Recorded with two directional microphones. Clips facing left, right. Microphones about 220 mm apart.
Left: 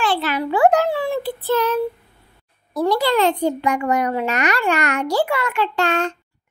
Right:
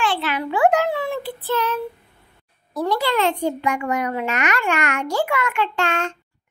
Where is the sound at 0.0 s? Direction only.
40° left (ahead or behind).